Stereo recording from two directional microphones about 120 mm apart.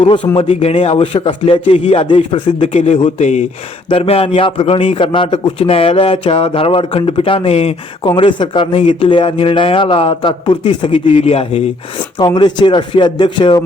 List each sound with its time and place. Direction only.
0.3 s a man's voice: 50° left (ahead or behind)
2.6 s speech: 70° left (ahead or behind)
3.8 s a man's voice: 50° left (ahead or behind)
8.0 s a man's voice: 45° left (ahead or behind)
12.2 s speech: 40° left (ahead or behind)